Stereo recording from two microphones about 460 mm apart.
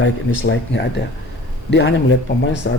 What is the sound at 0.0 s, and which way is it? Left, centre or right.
Speech, left.